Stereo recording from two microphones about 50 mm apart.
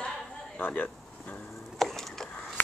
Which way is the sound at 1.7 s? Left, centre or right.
Centre.